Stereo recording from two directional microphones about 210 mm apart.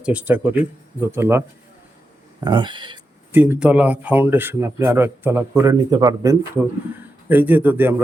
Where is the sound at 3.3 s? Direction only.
10° right (ahead or behind).